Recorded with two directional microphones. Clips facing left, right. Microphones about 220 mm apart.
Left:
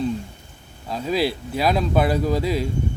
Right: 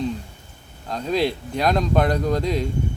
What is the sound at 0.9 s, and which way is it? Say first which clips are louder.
Speech: even; 5° left (ahead or behind).